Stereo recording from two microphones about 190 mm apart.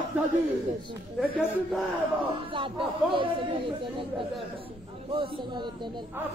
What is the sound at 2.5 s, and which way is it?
Speech, 25° right (ahead or behind).